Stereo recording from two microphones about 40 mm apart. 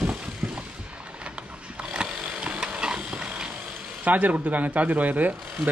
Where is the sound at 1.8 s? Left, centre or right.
Right.